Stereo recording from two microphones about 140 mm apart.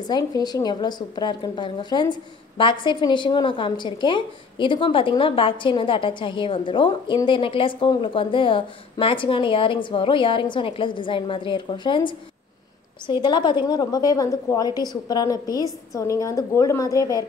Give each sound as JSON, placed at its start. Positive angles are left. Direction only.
{"t": 0.1, "sound": "a woman's voice", "side_deg": 30}